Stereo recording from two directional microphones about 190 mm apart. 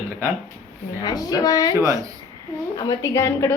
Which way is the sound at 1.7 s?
15° right (ahead or behind).